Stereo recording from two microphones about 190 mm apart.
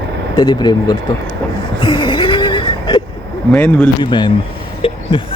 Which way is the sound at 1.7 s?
25° left (ahead or behind).